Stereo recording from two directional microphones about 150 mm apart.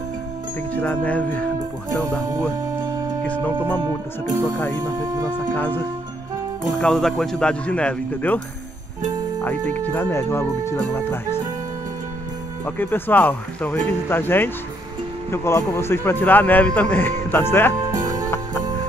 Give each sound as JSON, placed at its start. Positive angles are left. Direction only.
{"t": 0.7, "sound": "speech", "side_deg": 10}
{"t": 3.3, "sound": "speech", "side_deg": 10}
{"t": 4.8, "sound": "speech", "side_deg": -20}
{"t": 5.5, "sound": "speech", "side_deg": 10}
{"t": 6.8, "sound": "speech", "side_deg": 5}
{"t": 9.7, "sound": "speech", "side_deg": 10}
{"t": 12.6, "sound": "speech", "side_deg": 15}